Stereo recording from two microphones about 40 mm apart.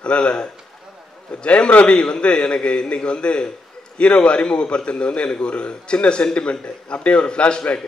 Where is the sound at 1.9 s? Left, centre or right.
Left.